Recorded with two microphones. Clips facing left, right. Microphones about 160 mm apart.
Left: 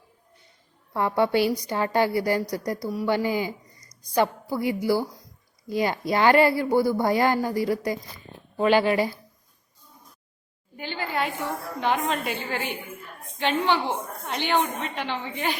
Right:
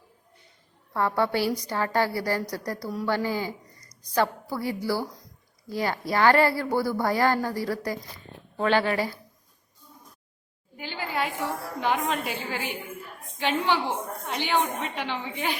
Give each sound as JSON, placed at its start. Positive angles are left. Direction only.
{"t": 0.9, "sound": "a woman's voice", "side_deg": 20}
{"t": 10.8, "sound": "a woman's voice", "side_deg": -5}